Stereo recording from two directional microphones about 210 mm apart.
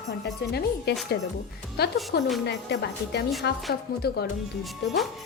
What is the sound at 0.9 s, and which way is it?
Speech, 50° left (ahead or behind).